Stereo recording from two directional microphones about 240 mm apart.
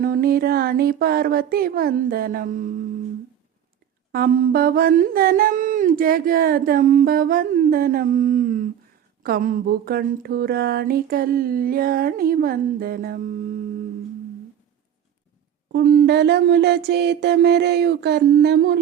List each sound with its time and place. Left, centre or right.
0.0 s humming: right
4.1 s humming: right
15.7 s a sound: right